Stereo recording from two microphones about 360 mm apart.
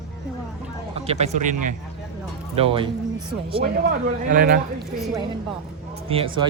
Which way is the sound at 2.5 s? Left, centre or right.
Centre.